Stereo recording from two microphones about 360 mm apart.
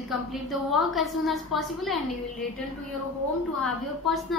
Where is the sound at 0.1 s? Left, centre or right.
Centre.